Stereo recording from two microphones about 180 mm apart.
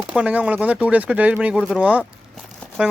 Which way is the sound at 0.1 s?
5° right (ahead or behind).